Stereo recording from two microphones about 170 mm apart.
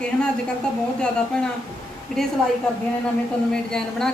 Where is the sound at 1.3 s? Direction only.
5° left (ahead or behind).